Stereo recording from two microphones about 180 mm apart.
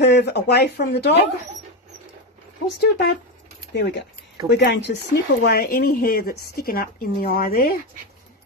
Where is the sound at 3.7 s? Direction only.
70° left (ahead or behind).